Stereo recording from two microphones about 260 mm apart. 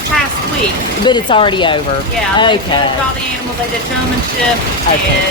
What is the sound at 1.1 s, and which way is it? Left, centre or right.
Speech, centre.